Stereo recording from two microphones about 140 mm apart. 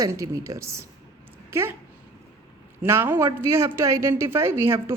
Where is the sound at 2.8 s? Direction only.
15° right (ahead or behind).